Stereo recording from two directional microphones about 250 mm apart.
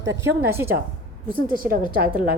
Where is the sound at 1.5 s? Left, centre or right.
Right.